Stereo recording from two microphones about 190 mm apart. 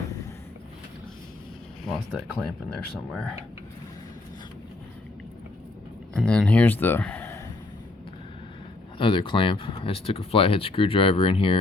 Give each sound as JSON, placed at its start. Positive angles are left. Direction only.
{"t": 1.9, "sound": "speech", "side_deg": 0}
{"t": 6.1, "sound": "speech", "side_deg": 5}
{"t": 9.0, "sound": "speech", "side_deg": 25}